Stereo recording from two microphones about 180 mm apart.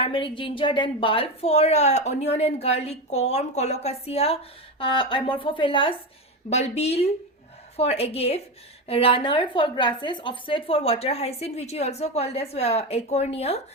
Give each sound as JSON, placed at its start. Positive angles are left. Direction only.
{"t": 0.0, "sound": "a woman's voice", "side_deg": 30}